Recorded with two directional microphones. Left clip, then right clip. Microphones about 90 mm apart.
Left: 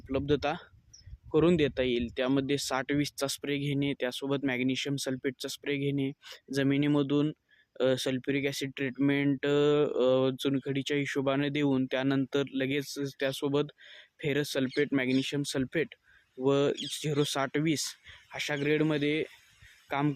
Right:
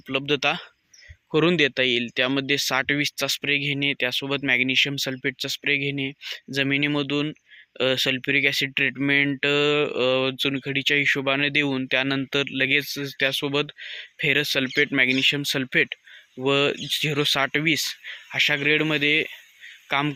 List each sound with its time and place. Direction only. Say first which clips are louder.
0.1 s speech: right 7 dB; 15° left (ahead or behind)
1.3 s speech: right 6 dB; 5° left (ahead or behind); by 7.3 s 30° left (ahead or behind)
7.8 s speech: right 6 dB; 20° left (ahead or behind)
14.7 s speech: right 10 dB; 5° left (ahead or behind)